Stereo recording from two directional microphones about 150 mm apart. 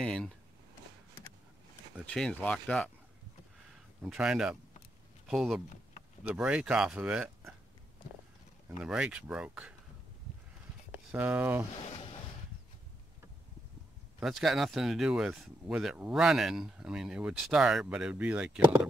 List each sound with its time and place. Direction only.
0.0 s speech: 5° left (ahead or behind)
2.0 s speech: 5° left (ahead or behind)
4.1 s speech: 5° right (ahead or behind)
8.7 s speech: 5° right (ahead or behind)
10.9 s speech: 10° right (ahead or behind)
11.8 s a sound: 40° left (ahead or behind)
14.2 s speech: centre (ahead or behind)